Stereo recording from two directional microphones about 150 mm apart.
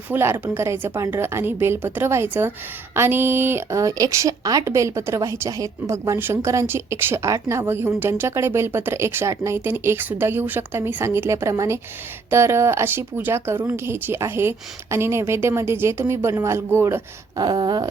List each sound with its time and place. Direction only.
0.1 s speech: 15° right (ahead or behind)